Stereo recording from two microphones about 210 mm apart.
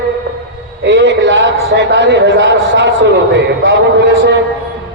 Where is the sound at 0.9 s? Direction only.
55° right (ahead or behind).